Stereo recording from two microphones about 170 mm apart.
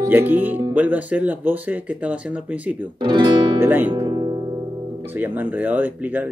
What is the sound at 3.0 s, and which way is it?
Speech, 25° right (ahead or behind).